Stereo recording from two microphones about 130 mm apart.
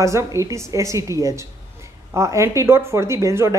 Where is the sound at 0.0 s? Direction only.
25° right (ahead or behind).